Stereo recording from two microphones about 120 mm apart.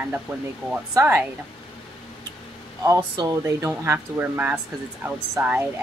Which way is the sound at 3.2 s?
25° right (ahead or behind).